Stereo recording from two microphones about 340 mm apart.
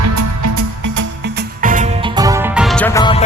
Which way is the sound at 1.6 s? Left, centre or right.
Right.